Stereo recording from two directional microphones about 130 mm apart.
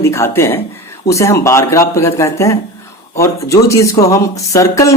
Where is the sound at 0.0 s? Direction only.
20° left (ahead or behind).